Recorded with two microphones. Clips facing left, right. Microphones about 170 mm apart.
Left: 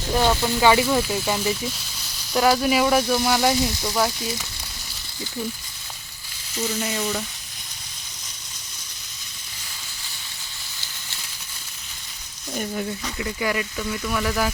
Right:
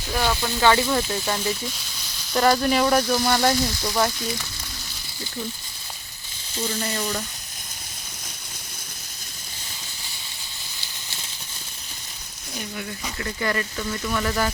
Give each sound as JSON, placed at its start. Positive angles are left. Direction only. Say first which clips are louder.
{"t": 0.1, "sound": "speech", "louder": "left 4 dB", "side_deg": 20}
{"t": 6.6, "sound": "speech", "louder": "left 1 dB", "side_deg": 5}
{"t": 13.1, "sound": "speech", "louder": "even", "side_deg": 10}